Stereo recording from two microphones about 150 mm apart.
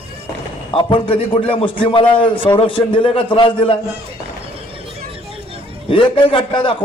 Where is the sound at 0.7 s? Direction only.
35° left (ahead or behind).